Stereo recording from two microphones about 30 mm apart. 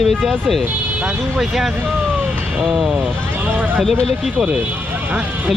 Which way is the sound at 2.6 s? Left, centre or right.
Right.